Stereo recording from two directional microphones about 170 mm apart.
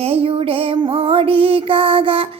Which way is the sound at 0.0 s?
35° right (ahead or behind).